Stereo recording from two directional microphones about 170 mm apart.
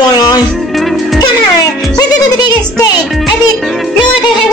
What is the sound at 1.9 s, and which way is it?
Music, 25° left (ahead or behind).